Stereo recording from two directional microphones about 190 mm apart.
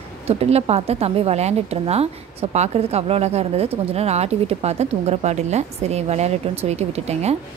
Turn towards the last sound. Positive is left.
turn(degrees=-35)  # may be behind; listen again after turning